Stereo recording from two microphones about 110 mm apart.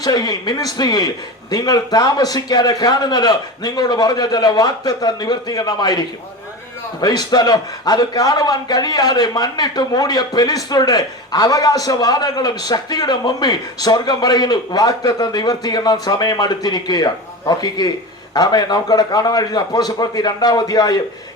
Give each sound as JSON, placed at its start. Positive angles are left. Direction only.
{"t": 0.0, "sound": "a man's voice", "side_deg": 40}
{"t": 7.0, "sound": "a man's voice", "side_deg": 35}